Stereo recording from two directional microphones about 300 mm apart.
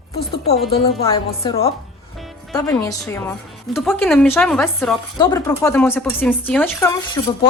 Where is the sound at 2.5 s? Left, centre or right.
Centre.